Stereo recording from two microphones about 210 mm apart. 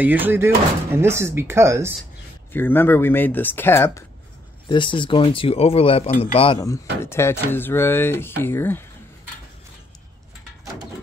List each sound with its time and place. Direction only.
0.0 s speech: 10° right (ahead or behind)
2.5 s speech: 10° left (ahead or behind)
4.6 s speech: 25° left (ahead or behind)